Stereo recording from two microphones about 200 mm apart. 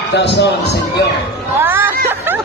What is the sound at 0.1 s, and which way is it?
Speech, 60° left (ahead or behind).